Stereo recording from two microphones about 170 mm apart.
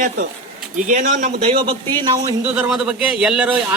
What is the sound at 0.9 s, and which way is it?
Speech, 50° right (ahead or behind).